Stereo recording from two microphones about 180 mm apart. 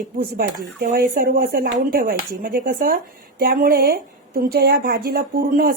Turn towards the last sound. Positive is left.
turn(degrees=-55)  # may be behind; listen again after turning